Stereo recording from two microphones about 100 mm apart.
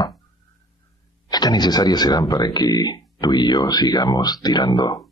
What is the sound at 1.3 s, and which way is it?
Speech, 40° left (ahead or behind).